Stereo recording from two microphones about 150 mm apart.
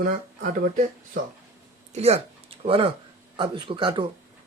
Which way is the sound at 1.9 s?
45° right (ahead or behind).